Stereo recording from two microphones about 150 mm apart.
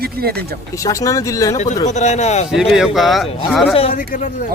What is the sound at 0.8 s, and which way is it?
Speech, 20° left (ahead or behind).